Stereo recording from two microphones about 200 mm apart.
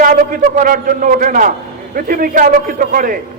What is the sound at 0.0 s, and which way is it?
A man's voice, 45° right (ahead or behind).